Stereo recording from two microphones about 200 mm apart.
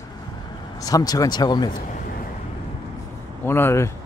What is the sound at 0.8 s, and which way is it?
Speech, 20° left (ahead or behind).